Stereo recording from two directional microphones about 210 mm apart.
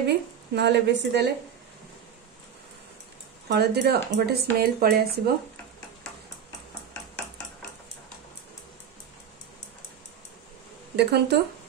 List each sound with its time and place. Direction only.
0.0 s speech: 55° right (ahead or behind)
3.4 s speech: 50° right (ahead or behind)
11.0 s speech: 50° right (ahead or behind)